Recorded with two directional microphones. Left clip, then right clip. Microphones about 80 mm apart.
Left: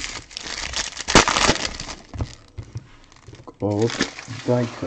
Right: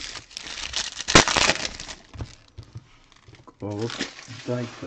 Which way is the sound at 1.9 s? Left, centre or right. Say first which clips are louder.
Left 4 dB; centre.